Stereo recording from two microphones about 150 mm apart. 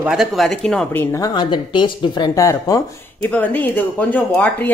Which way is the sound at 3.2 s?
10° left (ahead or behind).